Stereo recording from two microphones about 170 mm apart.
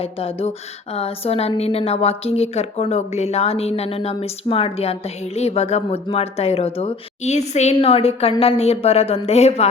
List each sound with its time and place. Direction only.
0.0 s a woman's voice: 35° left (ahead or behind)